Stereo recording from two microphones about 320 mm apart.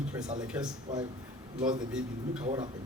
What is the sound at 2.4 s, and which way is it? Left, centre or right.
Speech, centre.